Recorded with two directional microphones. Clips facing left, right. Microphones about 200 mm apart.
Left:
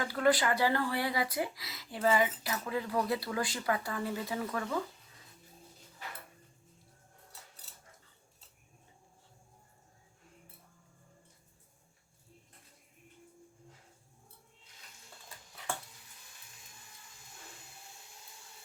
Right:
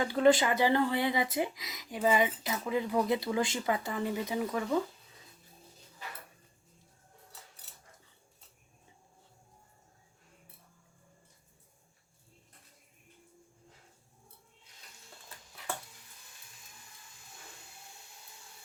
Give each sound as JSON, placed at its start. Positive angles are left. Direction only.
{"t": 0.0, "sound": "speech", "side_deg": -20}